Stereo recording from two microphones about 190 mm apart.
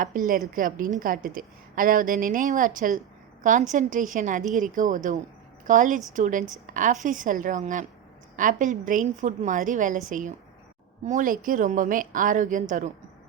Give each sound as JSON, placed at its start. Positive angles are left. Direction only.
{"t": 0.0, "sound": "a woman's voice", "side_deg": -45}